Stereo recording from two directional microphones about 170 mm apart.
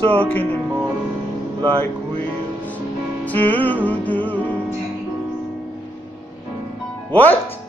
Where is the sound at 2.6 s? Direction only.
10° left (ahead or behind).